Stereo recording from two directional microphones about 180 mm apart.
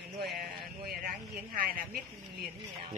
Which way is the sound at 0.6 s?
55° right (ahead or behind).